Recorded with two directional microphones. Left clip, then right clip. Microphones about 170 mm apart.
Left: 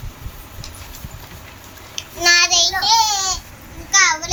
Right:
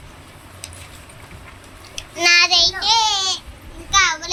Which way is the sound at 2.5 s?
5° right (ahead or behind).